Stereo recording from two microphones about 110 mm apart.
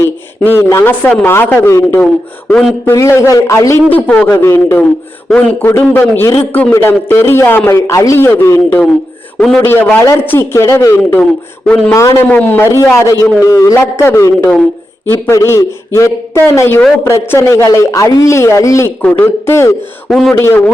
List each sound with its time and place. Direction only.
0.0 s speech: 20° left (ahead or behind)
3.8 s speech: 15° left (ahead or behind)
7.8 s speech: 30° left (ahead or behind)
11.2 s speech: 10° left (ahead or behind)
11.9 s speech: 30° left (ahead or behind)
12.3 s speech: 15° left (ahead or behind)
19.0 s speech: 15° left (ahead or behind)
20.1 s a man's voice: centre (ahead or behind)
20.3 s speech: 25° left (ahead or behind)